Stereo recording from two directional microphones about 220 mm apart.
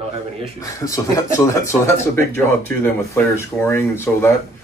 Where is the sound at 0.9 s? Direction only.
15° left (ahead or behind).